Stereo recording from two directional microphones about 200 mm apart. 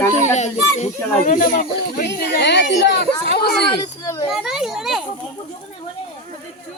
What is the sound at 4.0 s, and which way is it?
Speech, 20° left (ahead or behind).